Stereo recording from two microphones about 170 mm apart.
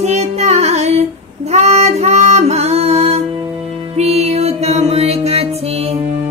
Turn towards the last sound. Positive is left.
turn(degrees=-35)  # may be behind; listen again after turning